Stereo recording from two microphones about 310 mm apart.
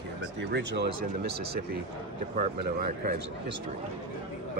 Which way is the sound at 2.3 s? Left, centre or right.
Right.